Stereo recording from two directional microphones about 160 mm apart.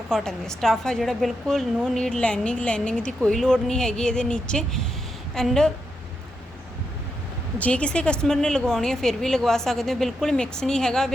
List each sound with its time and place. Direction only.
0.1 s a woman's voice: 5° left (ahead or behind)
7.6 s a woman's voice: 5° left (ahead or behind)